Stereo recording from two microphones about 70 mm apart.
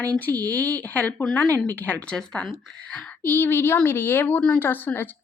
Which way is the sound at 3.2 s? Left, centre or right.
Left.